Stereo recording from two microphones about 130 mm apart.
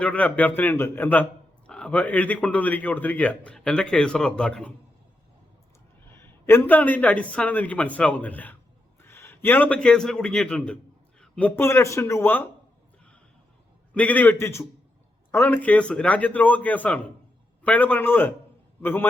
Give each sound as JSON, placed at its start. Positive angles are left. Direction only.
{"t": 0.0, "sound": "a man's voice", "side_deg": 10}
{"t": 6.1, "sound": "a man's voice", "side_deg": 20}
{"t": 13.9, "sound": "a man's voice", "side_deg": 10}